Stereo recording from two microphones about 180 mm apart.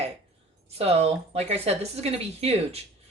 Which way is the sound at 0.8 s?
35° right (ahead or behind).